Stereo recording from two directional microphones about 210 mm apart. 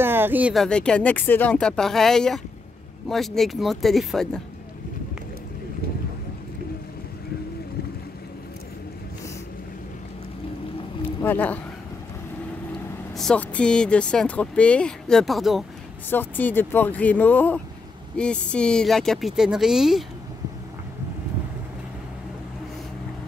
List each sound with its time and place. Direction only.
0.0 s speech: 10° right (ahead or behind)
11.2 s speech: 10° left (ahead or behind)
13.2 s speech: 5° left (ahead or behind)